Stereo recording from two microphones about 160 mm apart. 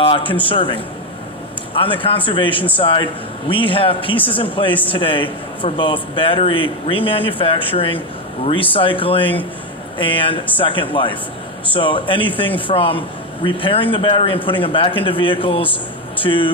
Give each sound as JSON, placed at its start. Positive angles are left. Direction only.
{"t": 0.0, "sound": "a man's voice", "side_deg": 35}